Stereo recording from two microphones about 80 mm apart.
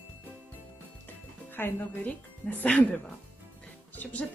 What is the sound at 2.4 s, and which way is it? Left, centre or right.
Speech, centre.